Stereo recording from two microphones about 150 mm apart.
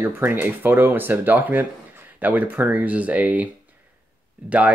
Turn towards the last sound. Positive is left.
turn(degrees=-10)  # may be behind; listen again after turning